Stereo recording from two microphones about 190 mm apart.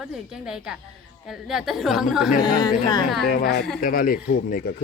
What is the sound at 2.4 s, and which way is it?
Speech, 20° left (ahead or behind).